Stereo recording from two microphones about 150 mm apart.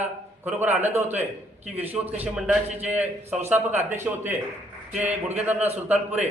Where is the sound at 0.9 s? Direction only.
45° right (ahead or behind).